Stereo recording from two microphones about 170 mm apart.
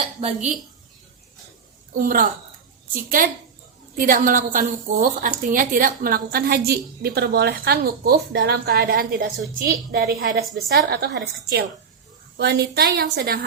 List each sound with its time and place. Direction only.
1.9 s a woman's voice: 55° right (ahead or behind); by 11.2 s 70° right (ahead or behind)
12.4 s a woman's voice: 75° right (ahead or behind)